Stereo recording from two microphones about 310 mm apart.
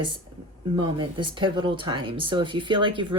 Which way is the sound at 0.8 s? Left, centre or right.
Centre.